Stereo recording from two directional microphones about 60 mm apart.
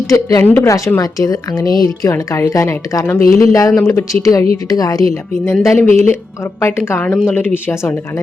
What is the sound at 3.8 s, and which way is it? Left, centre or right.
Speech, left.